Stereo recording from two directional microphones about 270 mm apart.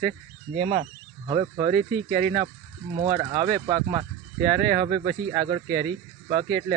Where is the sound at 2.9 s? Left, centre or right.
Centre.